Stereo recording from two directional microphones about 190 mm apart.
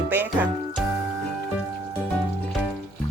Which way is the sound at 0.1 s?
10° right (ahead or behind).